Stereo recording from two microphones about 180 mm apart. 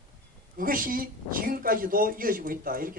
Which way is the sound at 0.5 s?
50° right (ahead or behind).